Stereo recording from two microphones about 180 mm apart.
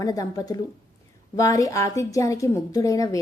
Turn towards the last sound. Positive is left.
turn(degrees=20)  # may be behind; listen again after turning